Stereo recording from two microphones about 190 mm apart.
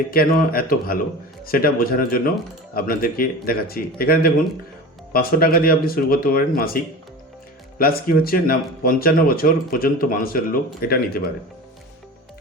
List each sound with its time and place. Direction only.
0.1 s speech: 50° left (ahead or behind)
7.8 s speech: 50° left (ahead or behind)